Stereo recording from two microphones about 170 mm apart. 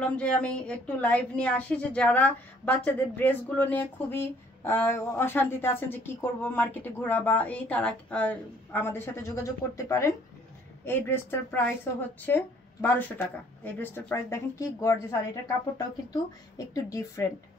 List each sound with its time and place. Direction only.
0.0 s a woman's voice: 5° left (ahead or behind)
16.1 s a woman's voice: 20° left (ahead or behind)